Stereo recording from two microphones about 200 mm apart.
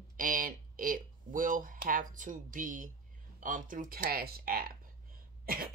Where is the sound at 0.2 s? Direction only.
45° right (ahead or behind).